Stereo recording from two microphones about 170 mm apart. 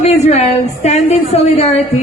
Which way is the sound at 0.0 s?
40° left (ahead or behind).